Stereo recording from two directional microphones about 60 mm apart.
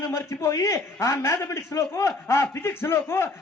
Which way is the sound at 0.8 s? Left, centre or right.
Left.